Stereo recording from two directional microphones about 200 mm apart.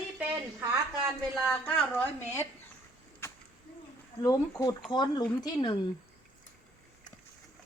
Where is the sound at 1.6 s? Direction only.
10° left (ahead or behind).